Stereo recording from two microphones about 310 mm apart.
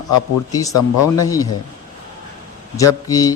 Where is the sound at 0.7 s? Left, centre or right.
Left.